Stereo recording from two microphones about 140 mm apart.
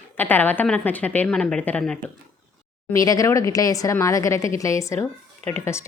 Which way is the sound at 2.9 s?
25° left (ahead or behind).